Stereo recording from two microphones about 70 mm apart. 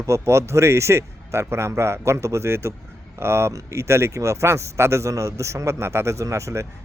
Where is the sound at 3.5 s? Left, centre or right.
Right.